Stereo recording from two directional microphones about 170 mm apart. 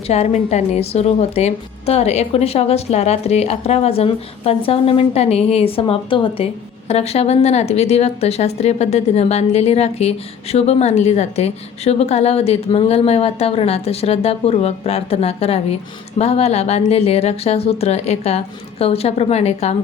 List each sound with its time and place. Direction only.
0.1 s a woman's voice: 40° left (ahead or behind)